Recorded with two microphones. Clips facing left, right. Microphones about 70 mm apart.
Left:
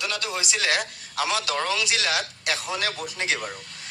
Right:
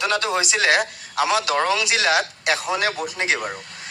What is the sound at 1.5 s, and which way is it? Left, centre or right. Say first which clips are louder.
A man's voice: right 5 dB; right.